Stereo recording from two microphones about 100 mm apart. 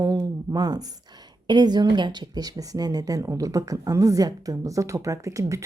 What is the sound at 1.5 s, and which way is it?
Speech, 45° right (ahead or behind).